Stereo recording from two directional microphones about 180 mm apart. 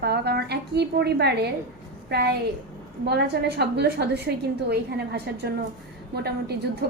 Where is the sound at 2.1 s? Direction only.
65° right (ahead or behind).